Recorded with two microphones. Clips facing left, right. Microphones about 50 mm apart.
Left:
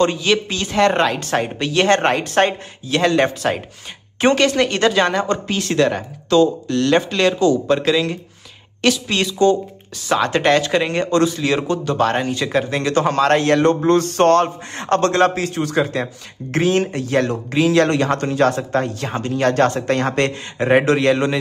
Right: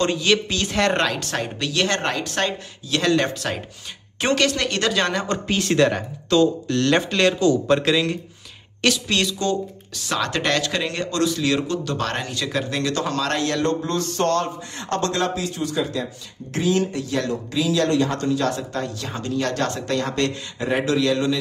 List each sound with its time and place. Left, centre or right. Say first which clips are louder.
0.0 s speech: left 3 dB; centre; by 3.0 s left
3.0 s speech: left 4 dB; left
5.3 s speech: left 1 dB; centre; by 21.4 s left